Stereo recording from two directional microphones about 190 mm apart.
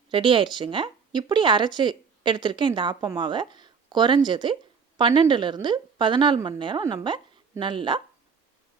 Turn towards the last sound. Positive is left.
turn(degrees=-25)  # may be behind; listen again after turning